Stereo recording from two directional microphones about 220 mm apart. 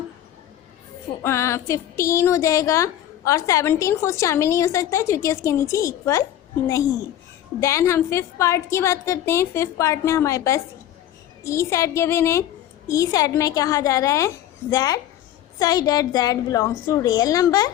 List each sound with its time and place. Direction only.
1.2 s speech: 10° left (ahead or behind)
7.6 s speech: 15° left (ahead or behind)